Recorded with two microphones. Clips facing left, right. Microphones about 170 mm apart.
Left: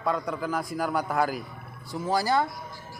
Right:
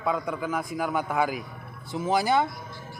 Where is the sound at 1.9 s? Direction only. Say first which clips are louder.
Right 2 dB; 20° right (ahead or behind).